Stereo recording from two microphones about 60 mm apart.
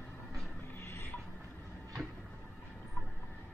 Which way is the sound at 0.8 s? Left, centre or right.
Left.